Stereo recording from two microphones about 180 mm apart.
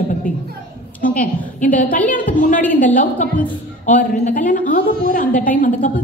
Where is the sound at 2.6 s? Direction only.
10° left (ahead or behind).